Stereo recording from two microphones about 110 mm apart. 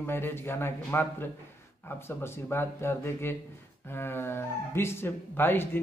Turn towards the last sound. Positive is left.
turn(degrees=20)  # may be behind; listen again after turning